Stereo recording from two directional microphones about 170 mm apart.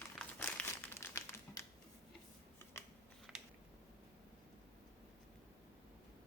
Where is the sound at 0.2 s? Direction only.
10° left (ahead or behind).